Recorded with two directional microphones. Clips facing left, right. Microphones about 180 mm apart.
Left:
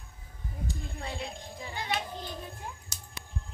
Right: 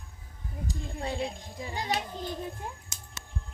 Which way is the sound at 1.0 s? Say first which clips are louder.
Right 7 dB; 35° right (ahead or behind).